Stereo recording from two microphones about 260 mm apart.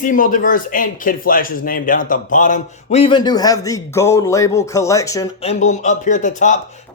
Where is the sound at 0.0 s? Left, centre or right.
Left; by 5.2 s centre.